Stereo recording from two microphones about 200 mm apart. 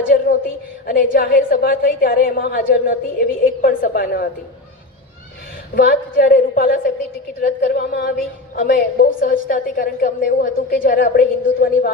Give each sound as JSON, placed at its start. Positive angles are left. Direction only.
{"t": 0.9, "sound": "a woman's voice", "side_deg": 45}
{"t": 5.7, "sound": "a woman's voice", "side_deg": 50}